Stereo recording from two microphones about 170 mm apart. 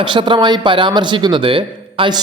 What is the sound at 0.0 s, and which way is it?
A man's voice, 30° right (ahead or behind).